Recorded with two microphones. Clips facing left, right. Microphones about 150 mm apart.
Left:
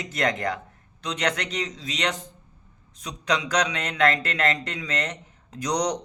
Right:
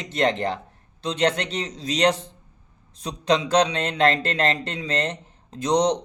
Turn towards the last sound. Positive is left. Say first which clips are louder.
# right 5 dB
turn(degrees=-25)  # may be behind; listen again after turning